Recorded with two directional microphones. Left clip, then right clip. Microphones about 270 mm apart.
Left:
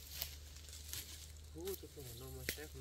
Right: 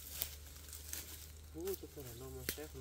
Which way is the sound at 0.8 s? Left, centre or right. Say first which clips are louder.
Even; right.